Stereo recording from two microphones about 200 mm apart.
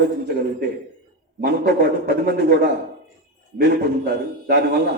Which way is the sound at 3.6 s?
55° right (ahead or behind).